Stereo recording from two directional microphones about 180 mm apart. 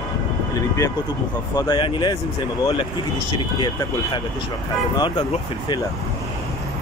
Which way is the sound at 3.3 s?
25° left (ahead or behind).